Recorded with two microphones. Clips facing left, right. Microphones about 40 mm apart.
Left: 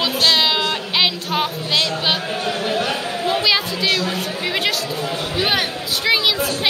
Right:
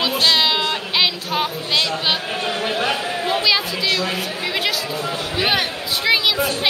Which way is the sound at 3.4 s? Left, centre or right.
Centre.